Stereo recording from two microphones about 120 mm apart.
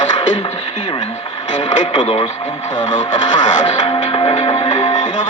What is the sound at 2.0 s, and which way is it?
Speech, 75° left (ahead or behind).